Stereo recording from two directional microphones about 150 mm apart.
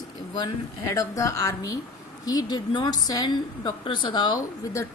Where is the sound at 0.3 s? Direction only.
25° left (ahead or behind).